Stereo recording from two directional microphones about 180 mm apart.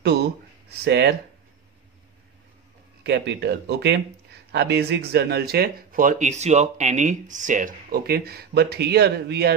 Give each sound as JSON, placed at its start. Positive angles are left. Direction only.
{"t": 0.0, "sound": "speech", "side_deg": -65}
{"t": 3.0, "sound": "speech", "side_deg": -70}